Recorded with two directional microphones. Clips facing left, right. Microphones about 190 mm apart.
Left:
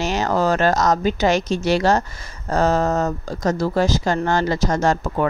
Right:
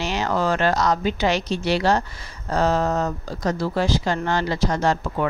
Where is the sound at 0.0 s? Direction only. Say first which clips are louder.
Left 3 dB; 45° left (ahead or behind).